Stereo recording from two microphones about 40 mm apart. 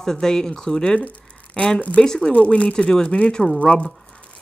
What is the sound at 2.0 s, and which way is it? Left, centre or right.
Speech, centre.